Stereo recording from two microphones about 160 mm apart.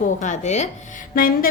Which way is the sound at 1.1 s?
65° left (ahead or behind).